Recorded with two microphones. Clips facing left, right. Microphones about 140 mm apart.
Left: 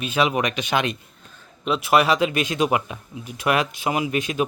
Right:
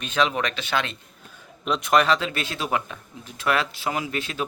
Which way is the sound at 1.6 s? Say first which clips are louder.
Left 2 dB; 5° left (ahead or behind).